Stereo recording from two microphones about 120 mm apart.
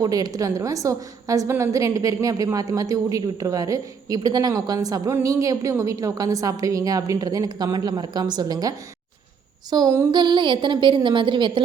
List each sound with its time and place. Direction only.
0.0 s a woman's voice: 30° right (ahead or behind)